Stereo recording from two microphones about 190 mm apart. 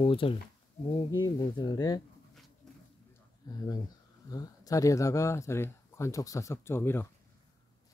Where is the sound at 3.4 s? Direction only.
20° left (ahead or behind).